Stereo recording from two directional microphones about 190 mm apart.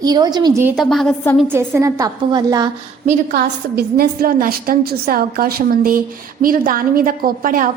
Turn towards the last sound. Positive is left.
turn(degrees=-45)  # may be behind; listen again after turning